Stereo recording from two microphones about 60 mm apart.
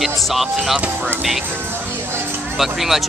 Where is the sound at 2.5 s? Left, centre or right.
Centre.